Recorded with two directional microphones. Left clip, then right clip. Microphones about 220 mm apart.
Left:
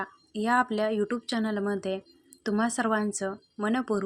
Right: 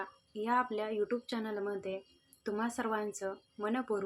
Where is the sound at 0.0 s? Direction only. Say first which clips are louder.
Left 7 dB; 40° left (ahead or behind).